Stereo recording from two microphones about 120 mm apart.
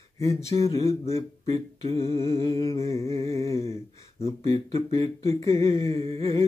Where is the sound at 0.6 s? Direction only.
25° left (ahead or behind).